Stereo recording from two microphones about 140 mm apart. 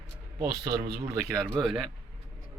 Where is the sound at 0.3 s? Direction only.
25° right (ahead or behind).